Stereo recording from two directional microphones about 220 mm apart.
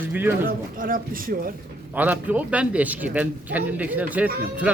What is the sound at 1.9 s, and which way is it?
A man's voice, 5° right (ahead or behind).